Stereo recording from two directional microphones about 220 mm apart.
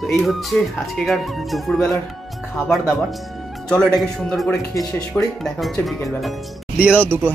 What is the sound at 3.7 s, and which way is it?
Speech, centre (ahead or behind).